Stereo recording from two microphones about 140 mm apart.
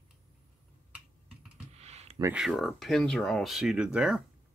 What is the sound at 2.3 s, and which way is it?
Speech, centre (ahead or behind).